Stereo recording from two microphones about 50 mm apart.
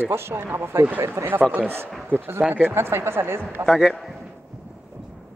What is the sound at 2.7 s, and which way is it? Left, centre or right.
Speech, right.